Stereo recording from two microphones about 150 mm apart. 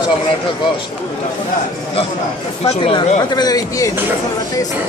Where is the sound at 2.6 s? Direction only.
35° left (ahead or behind).